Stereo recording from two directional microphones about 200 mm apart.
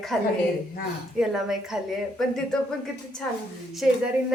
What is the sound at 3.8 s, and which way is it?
Speech, centre (ahead or behind).